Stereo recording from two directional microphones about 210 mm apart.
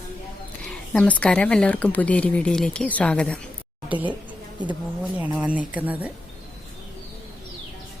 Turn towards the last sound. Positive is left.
turn(degrees=-5)  # may be behind; listen again after turning